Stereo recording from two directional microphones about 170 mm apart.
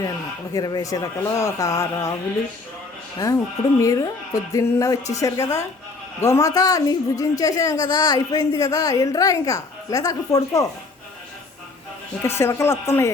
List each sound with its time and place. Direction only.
0.5 s a woman's voice: 20° left (ahead or behind)
3.2 s a woman's voice: 20° left (ahead or behind)
12.2 s speech: 15° left (ahead or behind)